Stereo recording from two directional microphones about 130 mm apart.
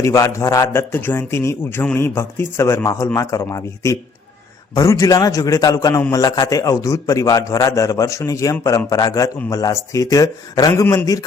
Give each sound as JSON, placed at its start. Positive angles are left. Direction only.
{"t": 0.0, "sound": "a man's voice", "side_deg": 25}